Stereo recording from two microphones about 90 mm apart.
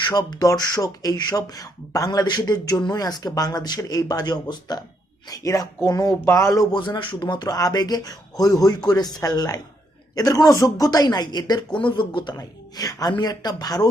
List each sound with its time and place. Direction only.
0.0 s speech: 50° left (ahead or behind)
5.3 s speech: 40° left (ahead or behind)
6.7 s speech: 60° left (ahead or behind)